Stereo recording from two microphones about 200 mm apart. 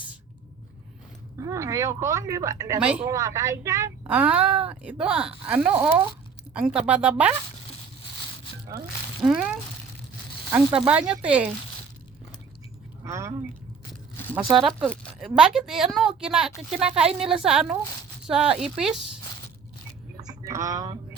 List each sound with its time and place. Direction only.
1.4 s a woman's voice: 15° right (ahead or behind)
2.8 s a woman's voice: 5° right (ahead or behind)
3.2 s a woman's voice: 15° right (ahead or behind)
9.2 s a woman's voice: 5° right (ahead or behind)
10.8 s a woman's voice: 5° right (ahead or behind)
13.1 s speech: 15° right (ahead or behind)
14.3 s a woman's voice: centre (ahead or behind)
20.1 s a sound: 15° right (ahead or behind)